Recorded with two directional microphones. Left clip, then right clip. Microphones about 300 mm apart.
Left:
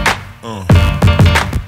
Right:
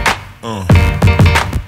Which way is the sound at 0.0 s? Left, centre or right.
Centre.